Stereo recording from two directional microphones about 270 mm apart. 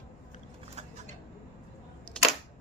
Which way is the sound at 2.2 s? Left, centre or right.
Centre.